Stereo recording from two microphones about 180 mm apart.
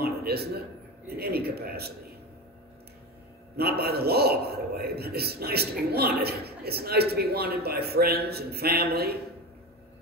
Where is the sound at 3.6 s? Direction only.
60° right (ahead or behind).